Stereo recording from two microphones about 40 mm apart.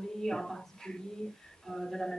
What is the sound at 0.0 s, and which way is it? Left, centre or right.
A woman's voice, centre.